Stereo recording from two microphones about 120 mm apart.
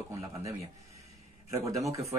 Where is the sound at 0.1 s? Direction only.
25° right (ahead or behind).